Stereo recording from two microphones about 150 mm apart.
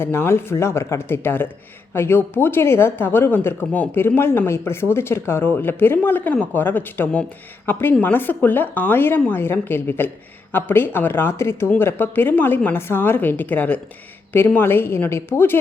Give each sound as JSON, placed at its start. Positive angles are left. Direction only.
{"t": 0.0, "sound": "speech", "side_deg": 15}